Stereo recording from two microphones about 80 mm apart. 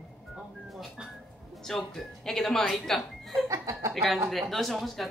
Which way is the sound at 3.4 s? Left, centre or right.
Right.